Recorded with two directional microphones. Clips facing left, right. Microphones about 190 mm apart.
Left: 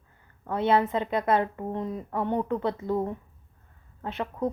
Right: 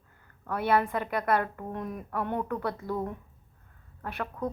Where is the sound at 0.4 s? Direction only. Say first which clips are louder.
Left 3 dB; 25° left (ahead or behind).